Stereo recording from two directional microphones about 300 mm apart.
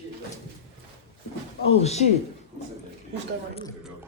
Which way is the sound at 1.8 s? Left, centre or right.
Left.